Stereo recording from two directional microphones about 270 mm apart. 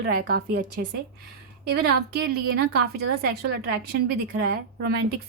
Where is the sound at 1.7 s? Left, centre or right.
Right.